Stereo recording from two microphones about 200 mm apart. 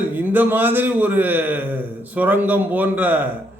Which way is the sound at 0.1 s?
10° right (ahead or behind).